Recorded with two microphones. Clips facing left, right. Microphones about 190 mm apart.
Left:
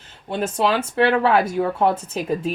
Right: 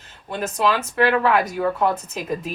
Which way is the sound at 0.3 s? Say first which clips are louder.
Left 1 dB; 25° left (ahead or behind).